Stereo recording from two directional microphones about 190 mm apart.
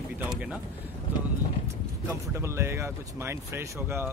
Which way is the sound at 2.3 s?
15° right (ahead or behind).